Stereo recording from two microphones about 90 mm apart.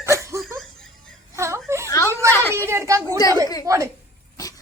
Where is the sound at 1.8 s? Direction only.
35° left (ahead or behind).